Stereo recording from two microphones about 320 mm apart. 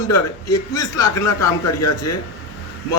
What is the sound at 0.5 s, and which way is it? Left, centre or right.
A man's voice, centre.